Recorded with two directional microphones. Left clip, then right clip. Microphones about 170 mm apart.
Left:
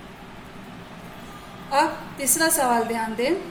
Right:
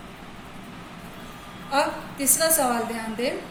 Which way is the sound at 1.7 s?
40° left (ahead or behind).